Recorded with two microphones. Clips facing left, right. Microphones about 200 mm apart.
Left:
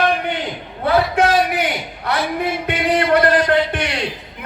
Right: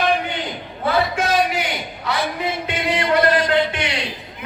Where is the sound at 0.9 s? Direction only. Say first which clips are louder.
Left 4 dB; 60° left (ahead or behind).